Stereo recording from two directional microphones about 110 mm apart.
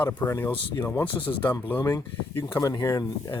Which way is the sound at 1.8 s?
35° left (ahead or behind).